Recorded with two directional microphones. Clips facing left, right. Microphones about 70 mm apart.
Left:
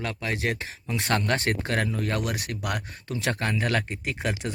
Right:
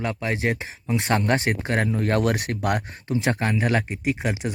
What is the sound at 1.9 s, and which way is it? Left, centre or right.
Speech, right.